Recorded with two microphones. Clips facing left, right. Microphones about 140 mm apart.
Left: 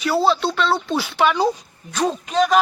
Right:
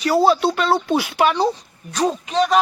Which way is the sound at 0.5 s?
50° right (ahead or behind).